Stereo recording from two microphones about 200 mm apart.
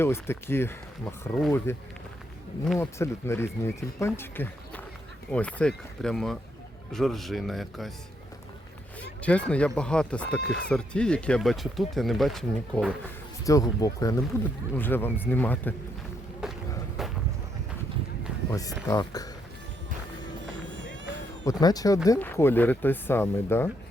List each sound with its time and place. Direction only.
0.0 s speech: 10° left (ahead or behind)
9.0 s speech: 5° left (ahead or behind)
13.4 s speech: 15° left (ahead or behind)
16.4 s a sound: 5° right (ahead or behind)
18.9 s speech: 20° left (ahead or behind)
21.4 s speech: 20° left (ahead or behind)